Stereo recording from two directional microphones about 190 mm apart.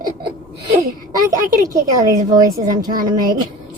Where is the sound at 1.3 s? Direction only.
20° right (ahead or behind).